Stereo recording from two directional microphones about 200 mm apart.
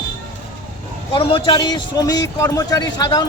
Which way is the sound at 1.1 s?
25° left (ahead or behind).